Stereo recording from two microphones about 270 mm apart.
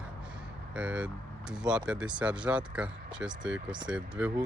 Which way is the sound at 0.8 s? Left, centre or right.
Centre.